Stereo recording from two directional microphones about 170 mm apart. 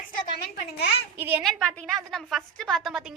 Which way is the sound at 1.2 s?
10° right (ahead or behind).